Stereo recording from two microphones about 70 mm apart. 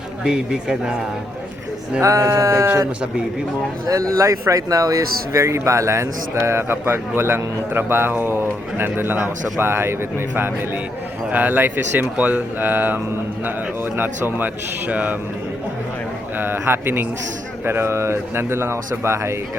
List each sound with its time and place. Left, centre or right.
0.3 s speech: centre
2.0 s speech: right
4.1 s speech: right
11.3 s speech: right
16.4 s speech: right